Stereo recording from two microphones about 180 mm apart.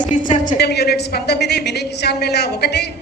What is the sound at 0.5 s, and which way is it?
A woman's voice, 65° left (ahead or behind).